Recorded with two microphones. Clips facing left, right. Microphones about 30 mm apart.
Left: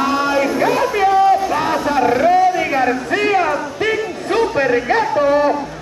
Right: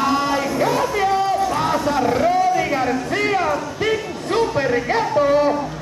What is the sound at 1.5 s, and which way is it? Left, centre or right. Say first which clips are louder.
Speech: left 2 dB; centre.